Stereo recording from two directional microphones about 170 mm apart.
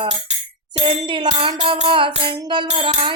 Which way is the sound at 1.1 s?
30° right (ahead or behind).